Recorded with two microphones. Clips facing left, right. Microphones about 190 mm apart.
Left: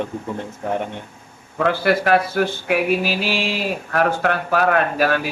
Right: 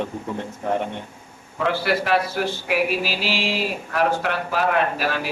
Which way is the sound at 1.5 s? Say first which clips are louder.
Left 4 dB; 50° left (ahead or behind).